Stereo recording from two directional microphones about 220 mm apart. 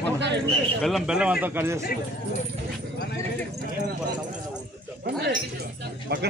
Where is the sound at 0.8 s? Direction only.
Centre (ahead or behind).